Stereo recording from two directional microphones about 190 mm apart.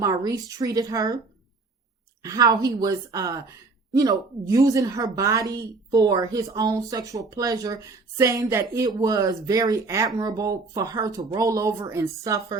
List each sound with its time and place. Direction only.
0.0 s speech: 20° right (ahead or behind)
2.2 s a woman's voice: 20° right (ahead or behind)